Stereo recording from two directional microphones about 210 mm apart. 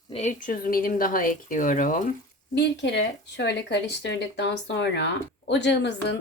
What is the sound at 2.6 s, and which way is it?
Speech, 55° left (ahead or behind).